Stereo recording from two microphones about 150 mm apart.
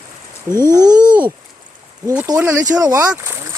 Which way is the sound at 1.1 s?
10° right (ahead or behind).